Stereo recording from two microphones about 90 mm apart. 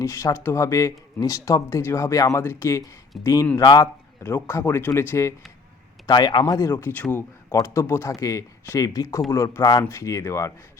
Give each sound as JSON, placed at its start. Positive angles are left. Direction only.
{"t": 0.0, "sound": "speech", "side_deg": 35}
{"t": 2.4, "sound": "speech", "side_deg": 25}
{"t": 3.1, "sound": "speech", "side_deg": 0}
{"t": 3.6, "sound": "speech", "side_deg": 50}
{"t": 4.2, "sound": "speech", "side_deg": 25}
{"t": 6.1, "sound": "speech", "side_deg": 55}
{"t": 6.5, "sound": "speech", "side_deg": 35}
{"t": 6.9, "sound": "speech", "side_deg": 20}
{"t": 7.5, "sound": "speech", "side_deg": 35}